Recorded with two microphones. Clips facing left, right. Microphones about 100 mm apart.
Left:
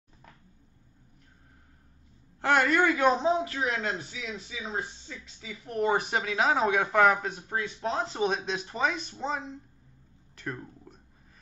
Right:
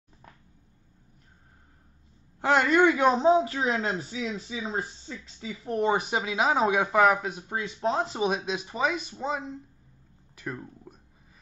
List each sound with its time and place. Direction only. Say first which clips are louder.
2.4 s speech: right 3 dB; 10° right (ahead or behind)
3.3 s speech: right 5 dB; 30° right (ahead or behind)
5.9 s speech: even; 5° right (ahead or behind)
10.3 s a sound: right 1 dB; 5° right (ahead or behind)